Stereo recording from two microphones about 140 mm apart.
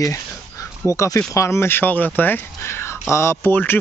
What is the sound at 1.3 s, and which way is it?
Speech, 20° left (ahead or behind).